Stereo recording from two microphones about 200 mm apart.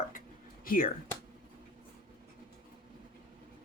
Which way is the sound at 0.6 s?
45° left (ahead or behind).